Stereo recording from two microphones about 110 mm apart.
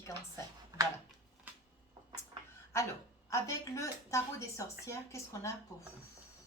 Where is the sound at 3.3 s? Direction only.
25° left (ahead or behind).